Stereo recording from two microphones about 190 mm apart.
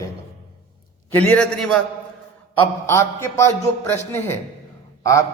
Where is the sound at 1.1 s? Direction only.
10° left (ahead or behind).